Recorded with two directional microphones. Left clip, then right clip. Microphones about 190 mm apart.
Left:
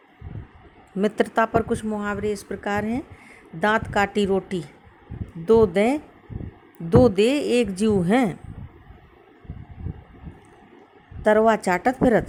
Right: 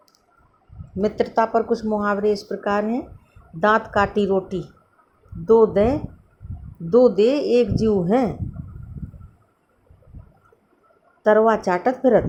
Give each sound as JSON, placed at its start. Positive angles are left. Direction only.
{"t": 1.0, "sound": "a woman's voice", "side_deg": 60}
{"t": 1.9, "sound": "speech", "side_deg": 20}
{"t": 6.9, "sound": "a woman's voice", "side_deg": 60}
{"t": 7.2, "sound": "speech", "side_deg": 35}
{"t": 11.2, "sound": "speech", "side_deg": 30}